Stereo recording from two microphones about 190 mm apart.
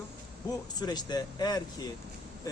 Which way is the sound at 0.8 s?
20° left (ahead or behind).